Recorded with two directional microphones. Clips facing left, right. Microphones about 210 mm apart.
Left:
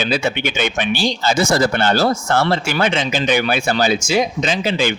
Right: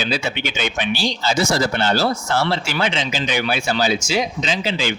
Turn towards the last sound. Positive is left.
turn(degrees=55)  # may be behind; listen again after turning